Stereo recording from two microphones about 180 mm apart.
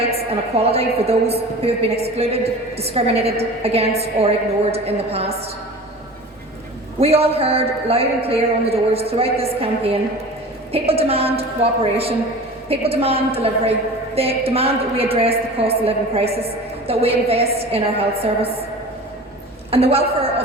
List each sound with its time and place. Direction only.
0.3 s a woman's voice: 35° right (ahead or behind)
7.0 s a woman's voice: 35° right (ahead or behind)
19.7 s a woman's voice: 35° right (ahead or behind)